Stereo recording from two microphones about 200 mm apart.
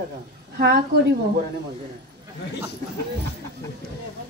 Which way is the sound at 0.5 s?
50° right (ahead or behind).